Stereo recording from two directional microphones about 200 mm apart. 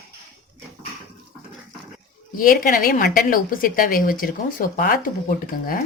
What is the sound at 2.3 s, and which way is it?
A woman's voice, 45° left (ahead or behind).